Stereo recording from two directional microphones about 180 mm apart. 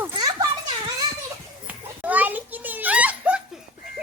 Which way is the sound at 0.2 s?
20° right (ahead or behind).